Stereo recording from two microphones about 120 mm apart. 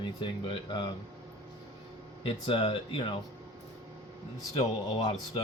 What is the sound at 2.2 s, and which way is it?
Speech, 45° left (ahead or behind).